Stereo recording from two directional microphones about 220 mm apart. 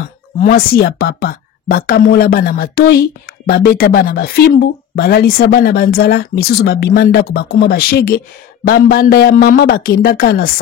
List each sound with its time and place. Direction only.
0.5 s speech: 45° left (ahead or behind)